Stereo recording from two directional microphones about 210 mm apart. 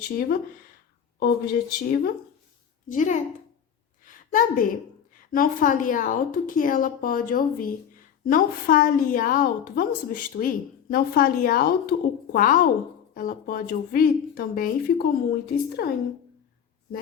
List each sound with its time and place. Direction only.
1.2 s a woman's voice: 45° left (ahead or behind)
4.0 s a sound: 40° left (ahead or behind)
5.3 s a woman's voice: 40° left (ahead or behind)